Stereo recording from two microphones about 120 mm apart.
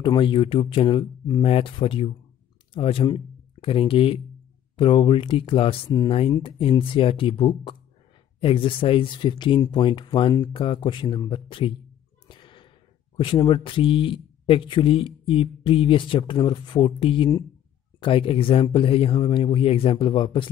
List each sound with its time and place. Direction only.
0.0 s speech: 40° left (ahead or behind)
1.4 s speech: 50° left (ahead or behind)
12.3 s a sound: 40° left (ahead or behind)
13.1 s speech: 45° left (ahead or behind)